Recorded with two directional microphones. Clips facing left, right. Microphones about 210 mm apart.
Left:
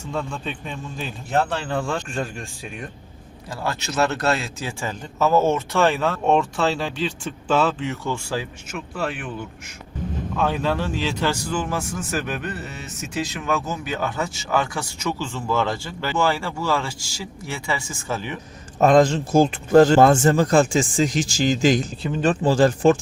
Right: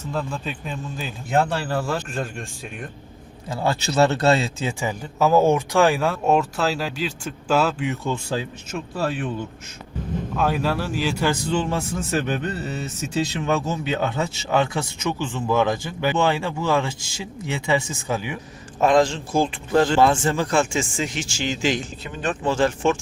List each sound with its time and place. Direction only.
0.1 s a man's voice: 5° right (ahead or behind)
3.5 s a man's voice: 25° right (ahead or behind)
4.8 s speech: 15° right (ahead or behind)
10.3 s speech: 10° right (ahead or behind)
11.4 s a man's voice: 25° right (ahead or behind)
18.8 s speech: 40° left (ahead or behind)